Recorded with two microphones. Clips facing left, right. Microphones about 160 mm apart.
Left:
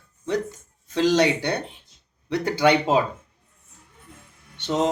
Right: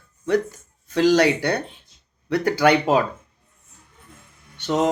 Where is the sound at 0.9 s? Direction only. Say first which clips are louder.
Right 3 dB; 25° left (ahead or behind).